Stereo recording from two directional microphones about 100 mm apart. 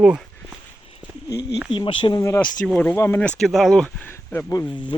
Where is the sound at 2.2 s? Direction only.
30° left (ahead or behind).